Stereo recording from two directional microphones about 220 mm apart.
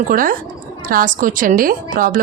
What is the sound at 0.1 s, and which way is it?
A woman's voice, 40° right (ahead or behind).